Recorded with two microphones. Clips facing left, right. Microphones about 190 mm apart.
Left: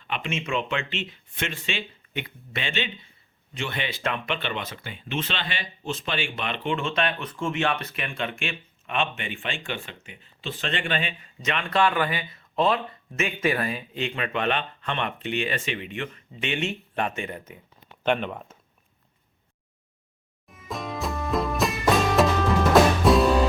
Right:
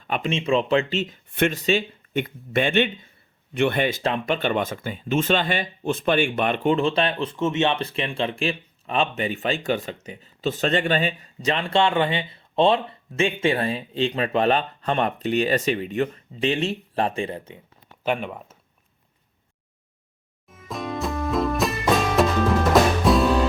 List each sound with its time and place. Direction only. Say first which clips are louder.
0.0 s speech: right 6 dB; 40° right (ahead or behind)
1.3 s speech: right 11 dB; 60° right (ahead or behind)
1.5 s speech: right 10 dB; 40° right (ahead or behind)
4.0 s speech: right 6 dB; 40° right (ahead or behind)
18.0 s speech: left 1 dB; 5° right (ahead or behind)
20.5 s music: right 3 dB; centre (ahead or behind)